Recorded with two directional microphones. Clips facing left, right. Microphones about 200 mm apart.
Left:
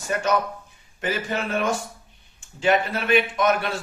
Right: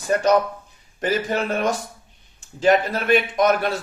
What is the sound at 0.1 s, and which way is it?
A man's voice, 35° right (ahead or behind).